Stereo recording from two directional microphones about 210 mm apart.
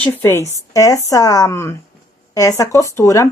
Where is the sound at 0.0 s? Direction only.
10° left (ahead or behind).